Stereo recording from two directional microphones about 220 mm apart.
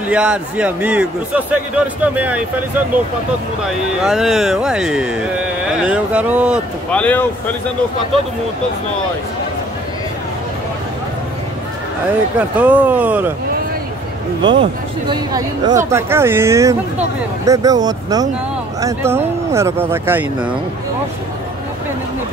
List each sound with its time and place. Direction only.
0.1 s a man's voice: 5° right (ahead or behind)
6.9 s speech: 5° left (ahead or behind)
12.4 s a man's voice: 5° right (ahead or behind)
14.4 s a man's voice: 20° right (ahead or behind)